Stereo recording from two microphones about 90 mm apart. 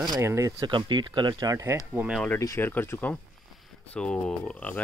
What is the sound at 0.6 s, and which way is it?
Speech, 55° right (ahead or behind).